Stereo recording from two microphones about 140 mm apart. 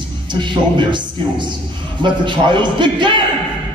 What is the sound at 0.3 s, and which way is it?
A man's voice, 35° right (ahead or behind).